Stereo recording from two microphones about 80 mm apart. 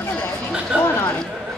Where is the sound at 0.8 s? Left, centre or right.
Left.